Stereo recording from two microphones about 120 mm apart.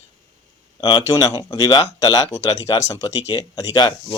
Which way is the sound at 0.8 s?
30° left (ahead or behind).